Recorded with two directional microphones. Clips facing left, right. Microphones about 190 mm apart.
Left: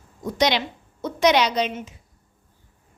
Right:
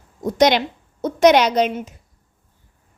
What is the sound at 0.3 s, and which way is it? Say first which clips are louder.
A woman's voice: right 6 dB; 45° right (ahead or behind).